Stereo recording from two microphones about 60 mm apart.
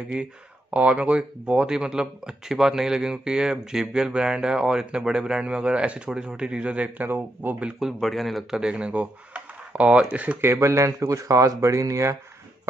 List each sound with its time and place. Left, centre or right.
0.1 s speech: right
7.1 s speech: right
7.8 s speech: centre
8.5 s speech: centre
10.4 s speech: right